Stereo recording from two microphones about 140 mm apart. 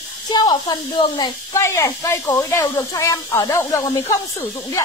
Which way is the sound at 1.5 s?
20° left (ahead or behind).